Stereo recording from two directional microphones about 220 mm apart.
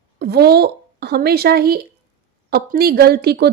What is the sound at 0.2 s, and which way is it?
A woman's voice, 45° right (ahead or behind).